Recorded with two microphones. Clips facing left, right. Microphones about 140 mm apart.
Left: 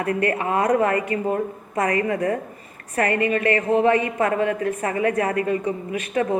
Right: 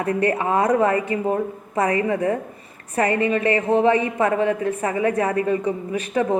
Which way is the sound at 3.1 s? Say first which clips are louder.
Even; 25° right (ahead or behind).